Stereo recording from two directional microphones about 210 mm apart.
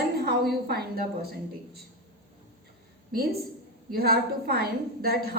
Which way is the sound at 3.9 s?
45° right (ahead or behind).